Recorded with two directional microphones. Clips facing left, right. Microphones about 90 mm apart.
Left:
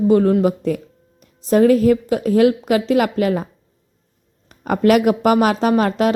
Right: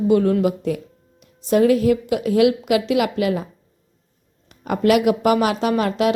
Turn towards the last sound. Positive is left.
turn(degrees=40)  # may be behind; listen again after turning